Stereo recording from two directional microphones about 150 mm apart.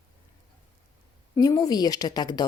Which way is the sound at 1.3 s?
25° left (ahead or behind).